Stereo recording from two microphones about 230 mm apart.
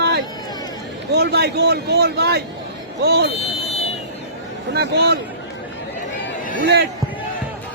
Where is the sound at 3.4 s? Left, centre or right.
Left.